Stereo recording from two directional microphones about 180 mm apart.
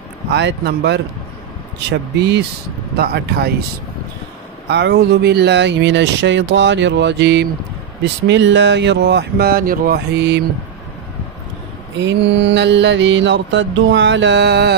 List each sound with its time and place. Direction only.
0.3 s speech: 70° right (ahead or behind)
4.6 s speech: 70° right (ahead or behind)
8.0 s speech: 85° right
12.0 s mantra: 75° right (ahead or behind)